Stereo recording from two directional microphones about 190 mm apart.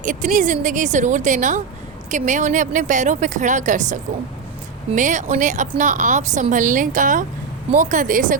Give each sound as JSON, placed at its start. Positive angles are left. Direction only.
{"t": 0.0, "sound": "a woman's voice", "side_deg": -40}